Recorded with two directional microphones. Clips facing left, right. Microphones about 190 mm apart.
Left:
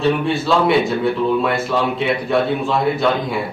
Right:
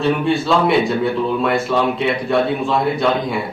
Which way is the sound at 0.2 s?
Centre (ahead or behind).